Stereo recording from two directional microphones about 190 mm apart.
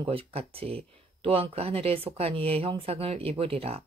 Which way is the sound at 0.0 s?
30° right (ahead or behind).